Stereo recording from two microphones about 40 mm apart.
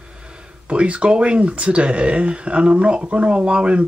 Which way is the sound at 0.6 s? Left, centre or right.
Right.